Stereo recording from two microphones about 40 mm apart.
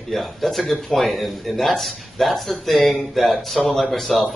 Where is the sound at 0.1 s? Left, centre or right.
Centre.